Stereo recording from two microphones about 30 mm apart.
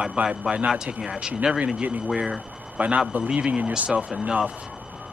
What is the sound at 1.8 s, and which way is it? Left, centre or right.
Speech, right.